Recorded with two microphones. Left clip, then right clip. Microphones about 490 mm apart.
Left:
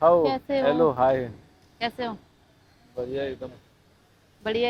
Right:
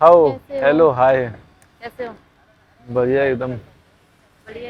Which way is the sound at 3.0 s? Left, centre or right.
Right.